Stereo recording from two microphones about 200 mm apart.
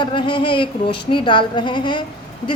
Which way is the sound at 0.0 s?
25° left (ahead or behind).